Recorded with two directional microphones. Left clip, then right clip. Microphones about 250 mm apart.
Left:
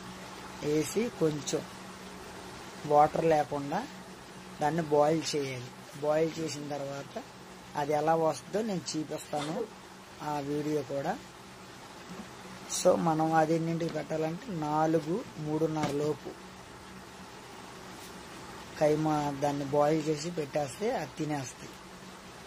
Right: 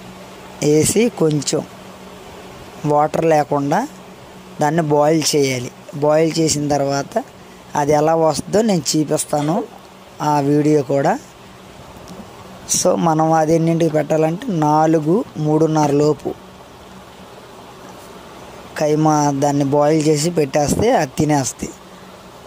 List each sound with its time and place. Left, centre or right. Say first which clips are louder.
0.7 s speech: right 16 dB; right
2.9 s speech: right 10 dB; right
12.6 s speech: right 10 dB; right
18.8 s speech: right 12 dB; right